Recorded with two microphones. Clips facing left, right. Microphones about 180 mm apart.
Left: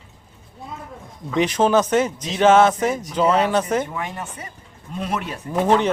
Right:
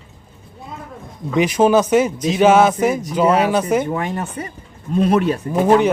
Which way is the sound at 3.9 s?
45° right (ahead or behind).